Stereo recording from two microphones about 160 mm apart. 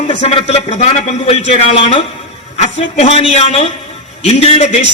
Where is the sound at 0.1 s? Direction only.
45° left (ahead or behind).